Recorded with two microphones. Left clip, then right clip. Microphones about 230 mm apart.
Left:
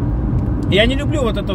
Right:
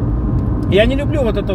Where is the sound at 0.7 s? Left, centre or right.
Centre.